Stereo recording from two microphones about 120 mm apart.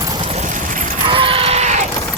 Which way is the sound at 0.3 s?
80° right.